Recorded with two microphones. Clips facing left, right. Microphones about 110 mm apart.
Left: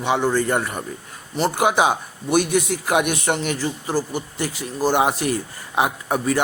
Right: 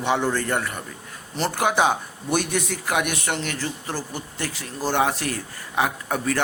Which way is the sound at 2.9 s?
20° left (ahead or behind).